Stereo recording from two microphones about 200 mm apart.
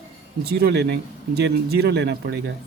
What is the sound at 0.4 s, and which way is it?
Speech, 55° right (ahead or behind).